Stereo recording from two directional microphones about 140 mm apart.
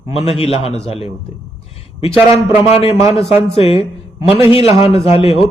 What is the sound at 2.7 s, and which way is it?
A man's voice, 45° left (ahead or behind).